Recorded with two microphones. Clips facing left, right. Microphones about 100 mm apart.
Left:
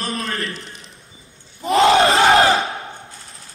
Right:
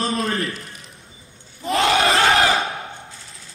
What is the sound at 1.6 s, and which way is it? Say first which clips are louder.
Crowd: left 5 dB; 30° left (ahead or behind).